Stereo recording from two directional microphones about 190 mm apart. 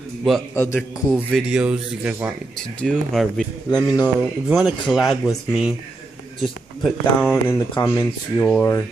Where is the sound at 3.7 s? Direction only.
20° left (ahead or behind).